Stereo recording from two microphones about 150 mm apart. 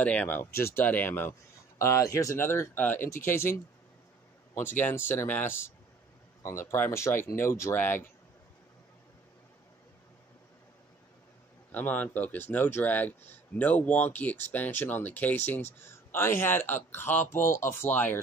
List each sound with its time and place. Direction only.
0.0 s speech: 10° left (ahead or behind)
4.6 s speech: 15° left (ahead or behind)
11.7 s speech: 10° left (ahead or behind)